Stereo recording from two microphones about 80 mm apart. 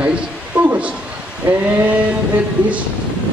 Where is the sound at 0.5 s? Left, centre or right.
Centre.